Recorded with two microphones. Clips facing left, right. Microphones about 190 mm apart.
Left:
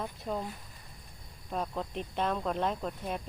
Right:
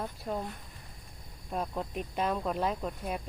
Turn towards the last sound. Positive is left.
turn(degrees=-5)  # may be behind; listen again after turning